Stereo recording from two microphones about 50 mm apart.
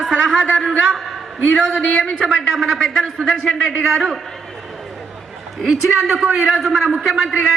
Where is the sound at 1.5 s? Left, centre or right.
Centre.